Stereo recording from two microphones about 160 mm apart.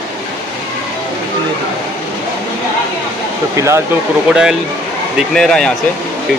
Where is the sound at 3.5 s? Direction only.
15° right (ahead or behind).